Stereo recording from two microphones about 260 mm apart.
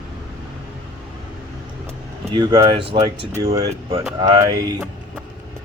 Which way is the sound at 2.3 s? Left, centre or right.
Centre.